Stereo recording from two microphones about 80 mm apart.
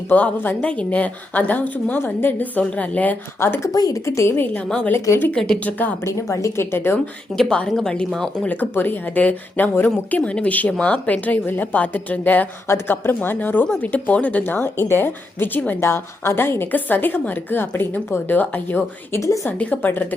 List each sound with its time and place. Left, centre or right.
0.1 s a woman's voice: left
3.4 s a woman's voice: left
3.7 s a woman's voice: left
4.5 s a woman's voice: centre
6.1 s a woman's voice: left
7.3 s a woman's voice: centre
7.7 s speech: centre
8.4 s a woman's voice: left
12.6 s a woman's voice: left